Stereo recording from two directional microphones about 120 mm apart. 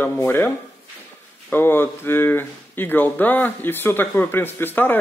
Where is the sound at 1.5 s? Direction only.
20° left (ahead or behind).